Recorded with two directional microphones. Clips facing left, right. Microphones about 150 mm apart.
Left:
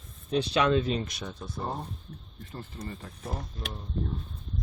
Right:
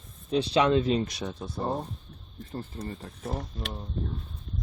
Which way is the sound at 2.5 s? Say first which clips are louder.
Right 4 dB; 35° right (ahead or behind).